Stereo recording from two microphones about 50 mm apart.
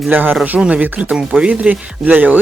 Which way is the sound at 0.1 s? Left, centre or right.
Right.